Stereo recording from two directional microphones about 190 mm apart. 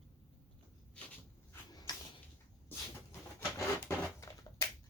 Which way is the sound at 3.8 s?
15° left (ahead or behind).